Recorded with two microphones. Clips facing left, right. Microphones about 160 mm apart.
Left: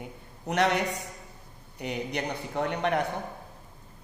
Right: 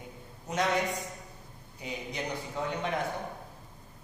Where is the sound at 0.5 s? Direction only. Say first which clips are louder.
Left 3 dB; 70° left (ahead or behind).